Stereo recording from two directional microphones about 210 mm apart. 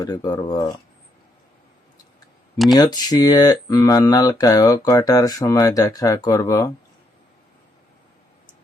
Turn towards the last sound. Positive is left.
turn(degrees=15)  # may be behind; listen again after turning